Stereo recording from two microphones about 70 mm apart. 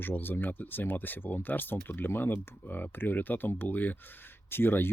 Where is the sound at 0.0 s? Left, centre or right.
Left.